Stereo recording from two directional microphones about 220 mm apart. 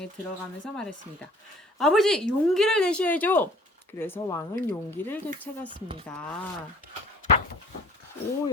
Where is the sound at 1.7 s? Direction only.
Centre (ahead or behind).